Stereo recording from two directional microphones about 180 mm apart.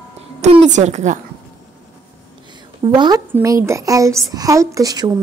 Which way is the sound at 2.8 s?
25° right (ahead or behind).